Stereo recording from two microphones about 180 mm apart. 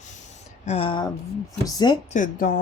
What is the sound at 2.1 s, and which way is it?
Speech, 50° left (ahead or behind).